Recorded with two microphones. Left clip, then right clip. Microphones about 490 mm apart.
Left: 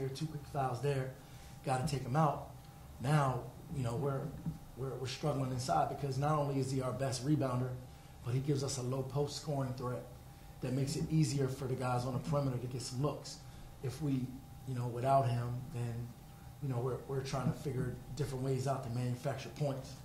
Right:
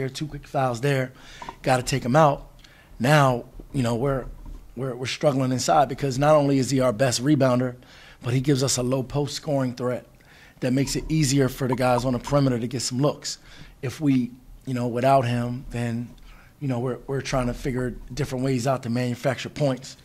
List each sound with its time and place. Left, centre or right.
0.1 s speech: right